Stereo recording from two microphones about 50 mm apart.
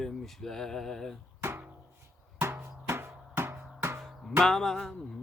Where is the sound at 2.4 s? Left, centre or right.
Right.